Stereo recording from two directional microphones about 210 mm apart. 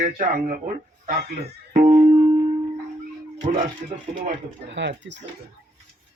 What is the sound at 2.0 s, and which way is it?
Music, 20° right (ahead or behind).